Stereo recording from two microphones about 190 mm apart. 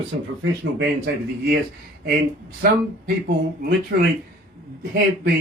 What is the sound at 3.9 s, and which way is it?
Speech, 55° right (ahead or behind).